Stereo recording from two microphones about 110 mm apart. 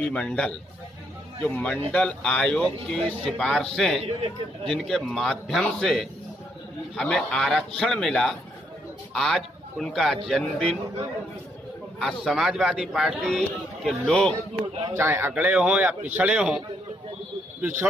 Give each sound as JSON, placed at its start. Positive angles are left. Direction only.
{"t": 0.0, "sound": "a man's voice", "side_deg": 10}
{"t": 4.0, "sound": "a man's voice", "side_deg": -60}
{"t": 4.6, "sound": "a man's voice", "side_deg": 5}
{"t": 12.0, "sound": "a man's voice", "side_deg": 0}
{"t": 13.8, "sound": "speech", "side_deg": 10}
{"t": 15.0, "sound": "a man's voice", "side_deg": -20}